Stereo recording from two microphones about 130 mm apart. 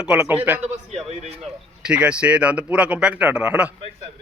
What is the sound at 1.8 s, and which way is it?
Speech, 10° right (ahead or behind).